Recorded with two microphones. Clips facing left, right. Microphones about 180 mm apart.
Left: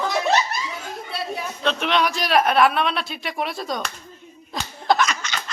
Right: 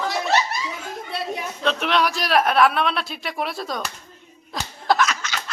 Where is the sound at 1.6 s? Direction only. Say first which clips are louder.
Even; centre (ahead or behind).